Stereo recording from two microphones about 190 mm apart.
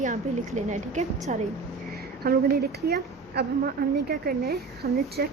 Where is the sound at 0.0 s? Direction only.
40° right (ahead or behind).